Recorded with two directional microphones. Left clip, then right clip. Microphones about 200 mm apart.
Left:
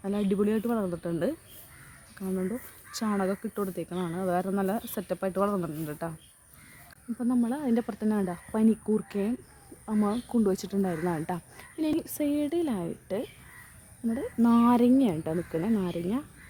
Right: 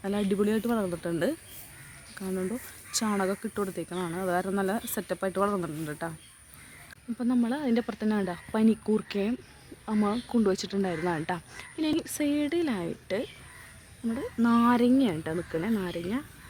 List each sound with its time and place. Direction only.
0.0 s speech: centre (ahead or behind)
7.2 s speech: 5° left (ahead or behind)
10.5 s speech: 10° left (ahead or behind)
14.2 s speech: 20° left (ahead or behind)